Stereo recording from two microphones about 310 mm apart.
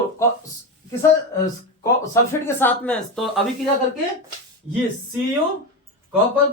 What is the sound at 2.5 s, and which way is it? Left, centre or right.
Speech, centre.